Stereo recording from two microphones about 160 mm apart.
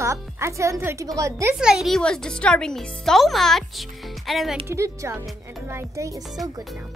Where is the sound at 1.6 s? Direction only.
5° right (ahead or behind).